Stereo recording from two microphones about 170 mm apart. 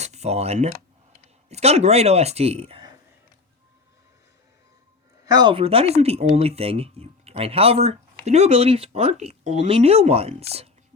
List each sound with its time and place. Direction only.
0.0 s speech: 40° right (ahead or behind)
5.2 s speech: 25° right (ahead or behind)